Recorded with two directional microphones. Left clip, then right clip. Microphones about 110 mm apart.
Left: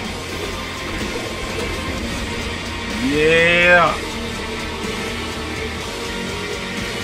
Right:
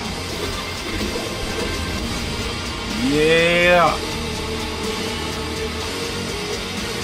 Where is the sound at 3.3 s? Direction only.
25° right (ahead or behind).